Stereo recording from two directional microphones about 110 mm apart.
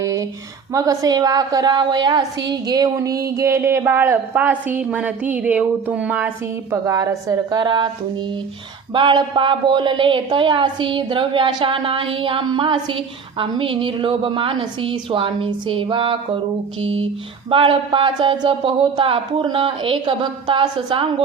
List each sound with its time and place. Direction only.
0.0 s a sound: 30° right (ahead or behind)
0.7 s a woman's voice: 35° right (ahead or behind); by 6.3 s 15° right (ahead or behind)
6.7 s a woman's voice: 30° right (ahead or behind)
7.6 s a woman's voice: 45° right (ahead or behind)
8.9 s a woman's voice: 50° right (ahead or behind)